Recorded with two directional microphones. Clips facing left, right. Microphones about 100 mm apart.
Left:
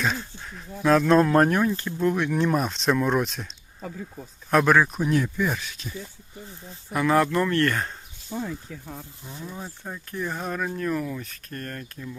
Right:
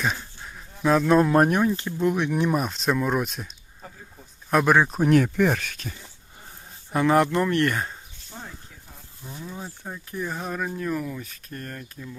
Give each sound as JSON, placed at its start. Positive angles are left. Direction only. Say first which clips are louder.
{"t": 0.0, "sound": "a sound", "louder": "left 1 dB", "side_deg": -10}
{"t": 0.8, "sound": "speech", "louder": "left 1 dB", "side_deg": -5}
{"t": 4.5, "sound": "speech", "louder": "even", "side_deg": -10}
{"t": 5.0, "sound": "speech", "louder": "right 5 dB", "side_deg": -65}
{"t": 6.9, "sound": "speech", "louder": "right 1 dB", "side_deg": -25}
{"t": 9.6, "sound": "speech", "louder": "even", "side_deg": -5}